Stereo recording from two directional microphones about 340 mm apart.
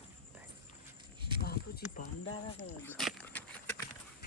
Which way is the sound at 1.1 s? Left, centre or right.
Centre.